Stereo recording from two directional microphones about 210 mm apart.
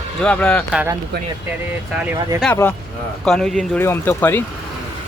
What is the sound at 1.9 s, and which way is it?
Speech, 10° right (ahead or behind).